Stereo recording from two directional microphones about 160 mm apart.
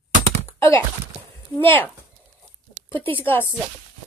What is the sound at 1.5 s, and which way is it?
Speech, 15° left (ahead or behind).